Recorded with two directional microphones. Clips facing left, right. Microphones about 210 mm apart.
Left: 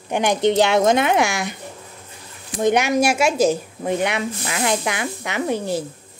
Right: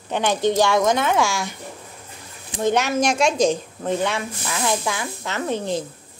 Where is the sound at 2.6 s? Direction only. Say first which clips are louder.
Left 2 dB; 15° left (ahead or behind).